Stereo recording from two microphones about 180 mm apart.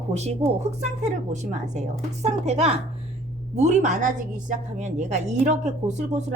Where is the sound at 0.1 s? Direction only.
35° right (ahead or behind).